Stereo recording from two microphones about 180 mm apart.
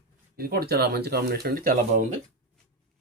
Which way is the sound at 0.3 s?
55° right (ahead or behind).